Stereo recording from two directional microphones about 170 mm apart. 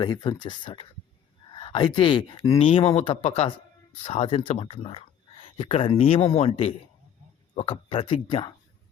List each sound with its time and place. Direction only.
0.0 s speech: 25° left (ahead or behind)